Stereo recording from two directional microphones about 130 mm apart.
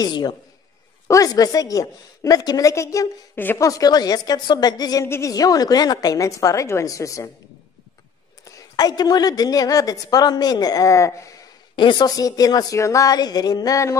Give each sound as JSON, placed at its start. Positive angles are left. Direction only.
{"t": 0.0, "sound": "a man's voice", "side_deg": 30}
{"t": 8.5, "sound": "a woman's voice", "side_deg": 30}
{"t": 11.7, "sound": "a woman's voice", "side_deg": 35}